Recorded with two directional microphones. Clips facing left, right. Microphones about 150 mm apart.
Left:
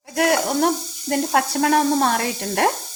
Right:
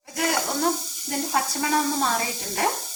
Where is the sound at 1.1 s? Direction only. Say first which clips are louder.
Left 6 dB; 70° left (ahead or behind).